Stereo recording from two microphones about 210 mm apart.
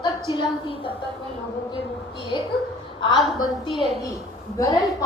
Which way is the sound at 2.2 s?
25° left (ahead or behind).